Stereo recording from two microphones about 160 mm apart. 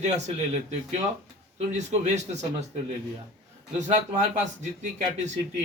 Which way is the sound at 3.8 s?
45° right (ahead or behind).